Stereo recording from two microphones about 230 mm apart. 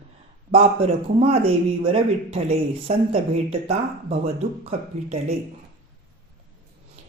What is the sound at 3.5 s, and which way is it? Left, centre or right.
Speech, right.